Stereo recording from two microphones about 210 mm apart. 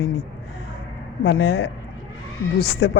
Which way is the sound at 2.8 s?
60° left (ahead or behind).